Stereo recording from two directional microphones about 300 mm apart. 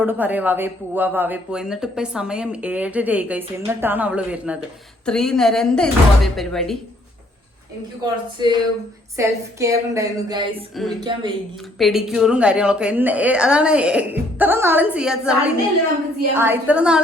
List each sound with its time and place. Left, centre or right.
0.0 s speech: centre
8.4 s a woman's voice: centre
11.8 s speech: centre